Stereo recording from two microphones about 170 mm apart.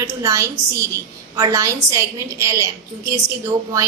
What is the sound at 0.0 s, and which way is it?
A woman's voice, 15° right (ahead or behind).